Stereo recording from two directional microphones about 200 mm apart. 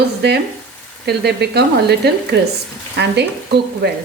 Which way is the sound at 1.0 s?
55° right (ahead or behind).